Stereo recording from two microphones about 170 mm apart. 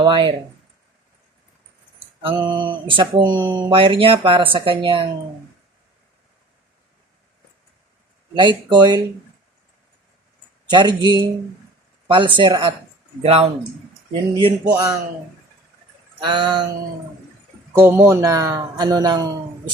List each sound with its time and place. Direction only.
0.0 s a man's voice: 30° right (ahead or behind)
2.2 s a man's voice: 25° right (ahead or behind)
8.4 s a man's voice: 25° right (ahead or behind)
10.7 s a man's voice: 25° right (ahead or behind)
14.7 s a man's voice: 20° right (ahead or behind)
16.2 s a man's voice: 25° right (ahead or behind)
17.7 s a man's voice: 15° right (ahead or behind)